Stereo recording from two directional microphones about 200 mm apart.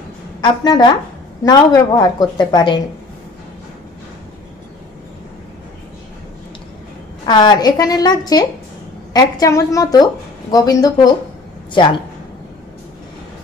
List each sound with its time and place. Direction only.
0.4 s a woman's voice: 20° left (ahead or behind)
7.2 s a woman's voice: 20° left (ahead or behind)